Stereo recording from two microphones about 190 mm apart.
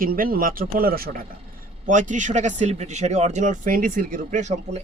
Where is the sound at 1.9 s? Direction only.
40° right (ahead or behind).